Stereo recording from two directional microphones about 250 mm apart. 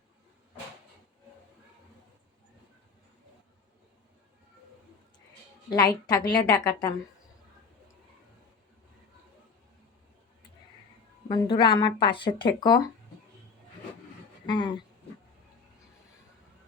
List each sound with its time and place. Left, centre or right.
5.7 s a woman's voice: centre
11.3 s speech: centre
14.4 s a sound: centre